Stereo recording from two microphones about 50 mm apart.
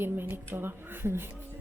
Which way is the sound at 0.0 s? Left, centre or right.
Right.